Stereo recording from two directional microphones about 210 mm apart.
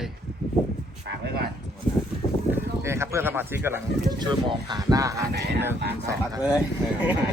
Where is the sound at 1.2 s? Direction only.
50° right (ahead or behind).